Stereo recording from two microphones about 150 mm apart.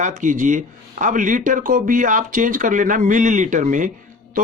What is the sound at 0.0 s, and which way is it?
Speech, 55° right (ahead or behind).